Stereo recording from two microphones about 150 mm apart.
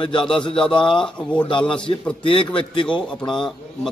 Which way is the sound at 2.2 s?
35° left (ahead or behind).